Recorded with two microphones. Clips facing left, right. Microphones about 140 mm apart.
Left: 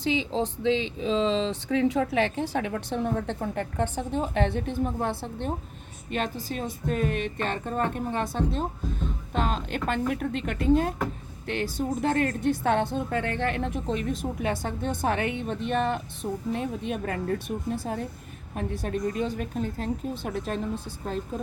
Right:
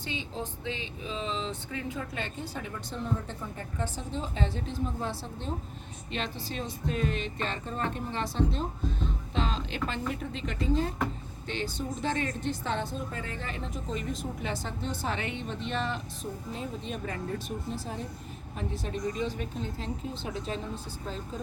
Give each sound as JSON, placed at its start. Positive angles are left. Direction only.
{"t": 0.0, "sound": "a woman's voice", "side_deg": 90}
{"t": 14.4, "sound": "a woman's voice", "side_deg": 55}